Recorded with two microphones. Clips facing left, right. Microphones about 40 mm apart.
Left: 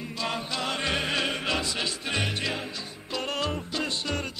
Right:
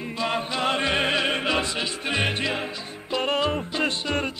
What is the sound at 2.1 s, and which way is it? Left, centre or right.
Music, right.